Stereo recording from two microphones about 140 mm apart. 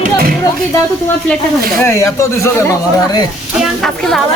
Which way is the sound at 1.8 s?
20° left (ahead or behind).